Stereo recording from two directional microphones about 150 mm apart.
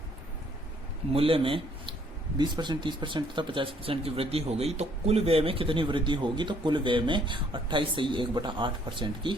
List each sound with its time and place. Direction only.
1.1 s speech: 40° right (ahead or behind)